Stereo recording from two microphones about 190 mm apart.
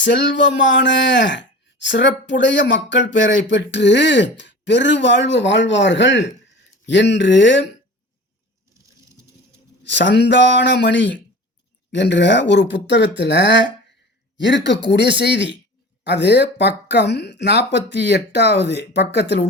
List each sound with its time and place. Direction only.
0.0 s speech: 70° left (ahead or behind)
9.5 s a man's voice: 65° left (ahead or behind)